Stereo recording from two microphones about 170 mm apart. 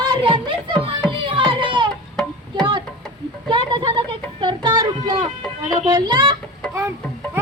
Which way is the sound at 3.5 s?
30° right (ahead or behind).